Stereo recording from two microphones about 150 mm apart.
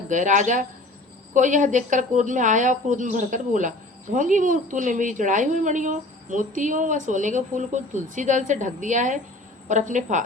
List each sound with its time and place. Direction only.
0.1 s a woman's voice: 55° right (ahead or behind)